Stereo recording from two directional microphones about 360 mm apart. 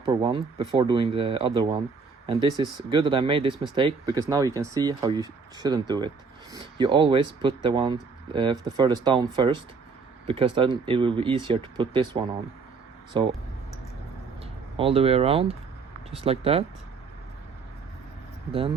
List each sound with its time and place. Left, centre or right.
0.0 s speech: centre
14.8 s speech: centre